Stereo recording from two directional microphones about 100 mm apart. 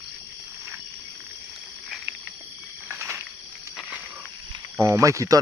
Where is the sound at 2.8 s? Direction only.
25° right (ahead or behind).